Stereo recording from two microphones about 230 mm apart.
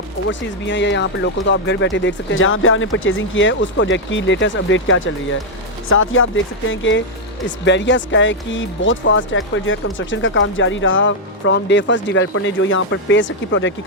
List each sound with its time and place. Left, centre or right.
0.3 s speech: left